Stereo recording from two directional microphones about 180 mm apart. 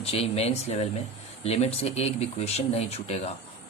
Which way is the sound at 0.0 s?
35° left (ahead or behind).